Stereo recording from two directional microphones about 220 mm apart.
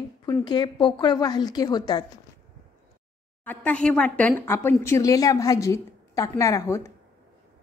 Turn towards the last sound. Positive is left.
turn(degrees=10)  # may be behind; listen again after turning